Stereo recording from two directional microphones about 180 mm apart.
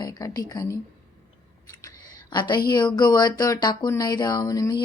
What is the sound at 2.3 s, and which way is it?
Speech, 25° left (ahead or behind).